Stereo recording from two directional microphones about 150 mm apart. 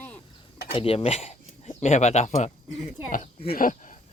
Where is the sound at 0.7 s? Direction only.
40° left (ahead or behind).